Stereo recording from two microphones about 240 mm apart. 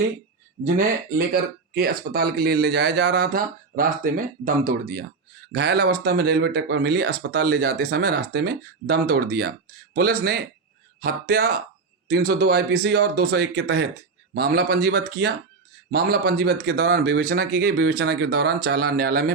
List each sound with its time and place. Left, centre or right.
1.3 s speech: right